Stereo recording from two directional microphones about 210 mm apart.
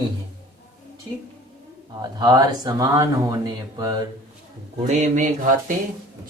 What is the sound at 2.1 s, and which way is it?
Speech, 20° right (ahead or behind).